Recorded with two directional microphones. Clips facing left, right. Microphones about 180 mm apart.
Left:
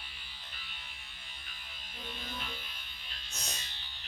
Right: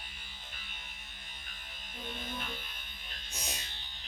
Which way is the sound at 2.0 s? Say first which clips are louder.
Right 2 dB; 50° right (ahead or behind).